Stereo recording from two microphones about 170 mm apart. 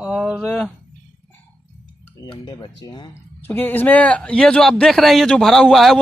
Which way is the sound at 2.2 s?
25° left (ahead or behind).